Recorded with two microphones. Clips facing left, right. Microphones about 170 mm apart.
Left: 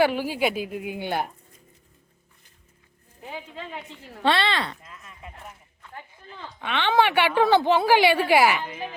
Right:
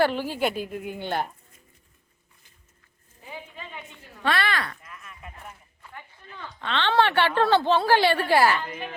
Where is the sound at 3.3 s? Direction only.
90° left.